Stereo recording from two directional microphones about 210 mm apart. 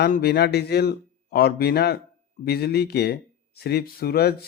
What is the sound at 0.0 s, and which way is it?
Speech, 50° left (ahead or behind).